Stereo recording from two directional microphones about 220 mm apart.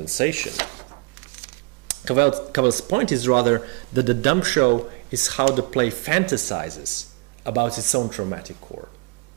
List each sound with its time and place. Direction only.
0.2 s speech: 10° right (ahead or behind)
1.9 s cutlery: 15° right (ahead or behind)
2.6 s speech: 35° right (ahead or behind)
2.9 s speech: 15° right (ahead or behind)
4.6 s speech: 30° right (ahead or behind)
5.2 s speech: 15° right (ahead or behind)